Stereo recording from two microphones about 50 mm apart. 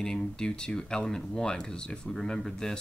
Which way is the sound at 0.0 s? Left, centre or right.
Centre.